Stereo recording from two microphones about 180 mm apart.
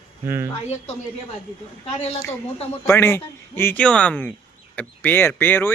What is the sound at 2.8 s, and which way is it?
Speech, 15° left (ahead or behind).